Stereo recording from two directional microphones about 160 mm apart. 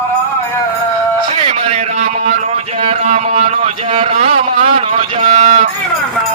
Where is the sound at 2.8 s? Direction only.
45° right (ahead or behind).